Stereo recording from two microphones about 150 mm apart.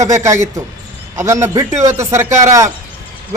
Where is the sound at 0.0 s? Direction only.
20° right (ahead or behind).